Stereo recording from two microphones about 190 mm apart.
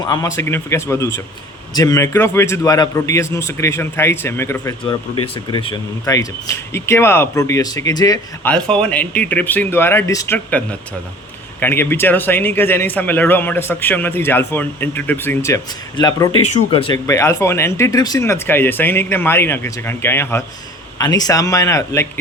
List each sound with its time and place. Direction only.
0.0 s speech: 20° left (ahead or behind)
4.9 s speech: 25° left (ahead or behind)
8.4 s speech: 5° left (ahead or behind)